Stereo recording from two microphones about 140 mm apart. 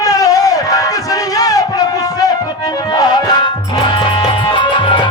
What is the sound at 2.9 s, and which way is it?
Music, 30° left (ahead or behind).